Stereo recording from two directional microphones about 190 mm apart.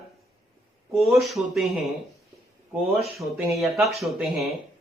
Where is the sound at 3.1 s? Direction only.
Centre (ahead or behind).